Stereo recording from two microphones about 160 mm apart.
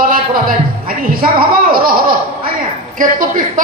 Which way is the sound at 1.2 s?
65° right (ahead or behind).